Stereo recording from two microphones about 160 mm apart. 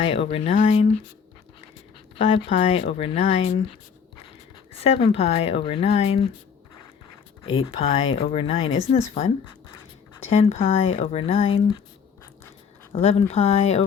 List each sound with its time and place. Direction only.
0.0 s speech: 35° left (ahead or behind)
0.5 s speech: 50° left (ahead or behind)
2.1 s speech: 35° left (ahead or behind)
7.4 s speech: 30° left (ahead or behind)
12.9 s speech: 40° left (ahead or behind)